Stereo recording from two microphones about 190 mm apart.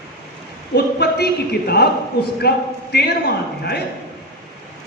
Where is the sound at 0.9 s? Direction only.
55° left (ahead or behind).